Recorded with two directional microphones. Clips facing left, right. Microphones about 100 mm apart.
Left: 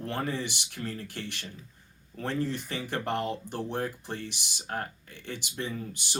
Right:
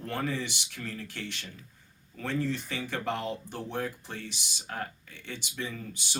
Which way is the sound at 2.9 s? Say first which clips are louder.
Left 2 dB; 50° left (ahead or behind).